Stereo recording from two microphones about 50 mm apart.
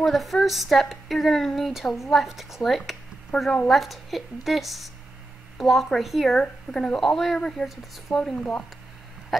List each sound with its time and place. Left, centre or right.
0.0 s a woman's voice: centre
3.3 s speech: centre
3.6 s a woman's voice: centre
6.4 s speech: centre
7.0 s a woman's voice: centre
7.3 s speech: centre
7.6 s a woman's voice: centre
8.1 s speech: centre
9.3 s hiccup: centre